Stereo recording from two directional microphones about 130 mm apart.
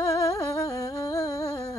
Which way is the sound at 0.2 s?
25° left (ahead or behind).